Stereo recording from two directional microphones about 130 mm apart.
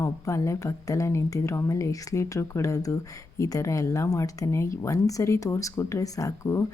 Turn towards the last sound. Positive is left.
turn(degrees=25)  # may be behind; listen again after turning